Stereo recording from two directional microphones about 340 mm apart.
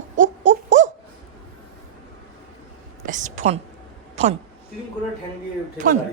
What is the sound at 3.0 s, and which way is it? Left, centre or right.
Speech, right.